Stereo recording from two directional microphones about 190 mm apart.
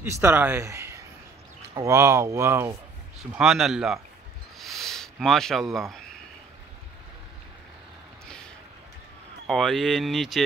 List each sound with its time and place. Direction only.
0.0 s speech: 10° right (ahead or behind)
3.2 s speech: centre (ahead or behind)
4.6 s a sound: centre (ahead or behind)
9.5 s speech: centre (ahead or behind)